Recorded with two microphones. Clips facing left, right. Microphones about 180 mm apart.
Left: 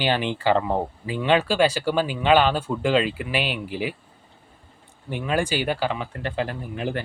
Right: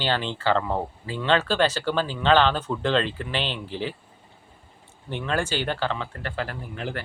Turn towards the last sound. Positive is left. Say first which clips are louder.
# left 4 dB
turn(degrees=15)  # may be behind; listen again after turning